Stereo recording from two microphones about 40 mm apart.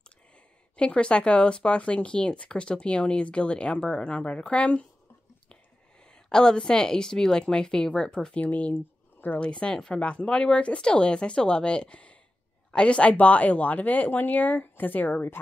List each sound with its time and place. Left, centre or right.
0.7 s speech: left
6.2 s speech: centre
8.4 s speech: left
8.7 s a sound: left
9.4 s speech: left
13.1 s speech: left